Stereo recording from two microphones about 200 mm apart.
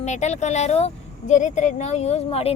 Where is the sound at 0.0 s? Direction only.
35° left (ahead or behind).